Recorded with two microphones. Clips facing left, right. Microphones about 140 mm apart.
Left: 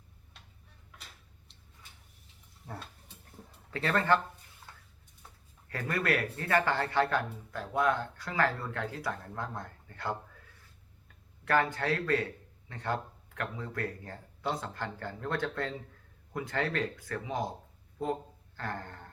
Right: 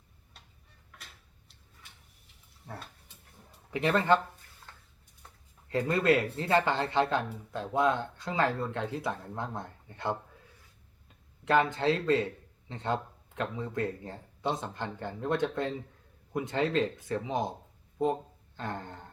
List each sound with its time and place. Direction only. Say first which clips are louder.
3.7 s speech: right 3 dB; 20° right (ahead or behind)
5.6 s a man's voice: right 6 dB; 20° right (ahead or behind)